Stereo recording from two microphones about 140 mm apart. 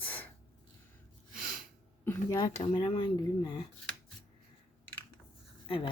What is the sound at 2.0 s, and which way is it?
Speech, 25° left (ahead or behind).